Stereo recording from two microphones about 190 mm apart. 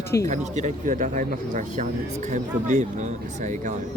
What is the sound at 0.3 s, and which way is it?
Speech, 40° right (ahead or behind).